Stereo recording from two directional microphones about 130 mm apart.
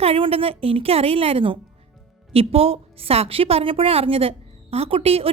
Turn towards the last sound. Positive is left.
turn(degrees=-50)  # may be behind; listen again after turning